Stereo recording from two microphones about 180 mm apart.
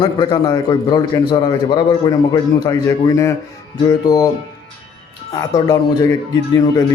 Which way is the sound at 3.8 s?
20° left (ahead or behind).